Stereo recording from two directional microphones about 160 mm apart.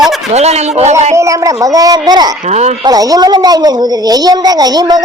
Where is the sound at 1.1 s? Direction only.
20° right (ahead or behind).